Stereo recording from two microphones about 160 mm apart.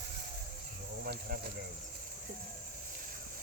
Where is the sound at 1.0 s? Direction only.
80° right.